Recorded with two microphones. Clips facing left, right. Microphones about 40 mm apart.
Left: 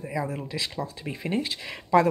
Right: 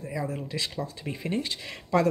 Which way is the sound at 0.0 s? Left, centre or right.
Centre.